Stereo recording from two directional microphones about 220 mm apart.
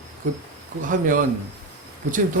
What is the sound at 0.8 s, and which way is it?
Speech, 35° right (ahead or behind).